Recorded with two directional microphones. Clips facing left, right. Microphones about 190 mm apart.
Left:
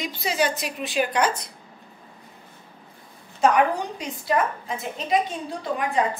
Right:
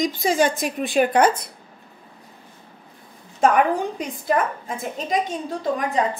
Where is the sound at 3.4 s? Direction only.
50° right (ahead or behind).